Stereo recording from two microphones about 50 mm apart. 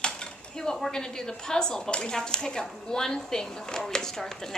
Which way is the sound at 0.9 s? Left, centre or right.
Centre.